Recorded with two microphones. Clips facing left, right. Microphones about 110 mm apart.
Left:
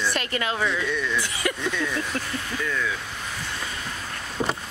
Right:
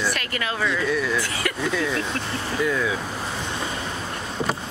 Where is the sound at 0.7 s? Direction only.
Centre (ahead or behind).